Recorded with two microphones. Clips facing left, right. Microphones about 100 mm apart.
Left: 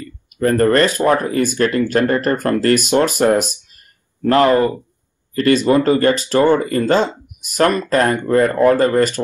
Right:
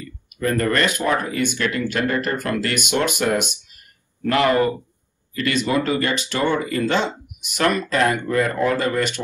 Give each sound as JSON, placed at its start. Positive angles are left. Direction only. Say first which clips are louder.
{"t": 0.4, "sound": "speech", "louder": "left 7 dB", "side_deg": 35}